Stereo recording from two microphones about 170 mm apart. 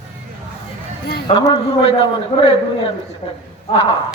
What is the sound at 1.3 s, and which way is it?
A man's voice, 40° left (ahead or behind).